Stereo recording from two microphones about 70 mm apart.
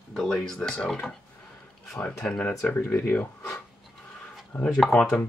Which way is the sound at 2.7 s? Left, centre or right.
Left.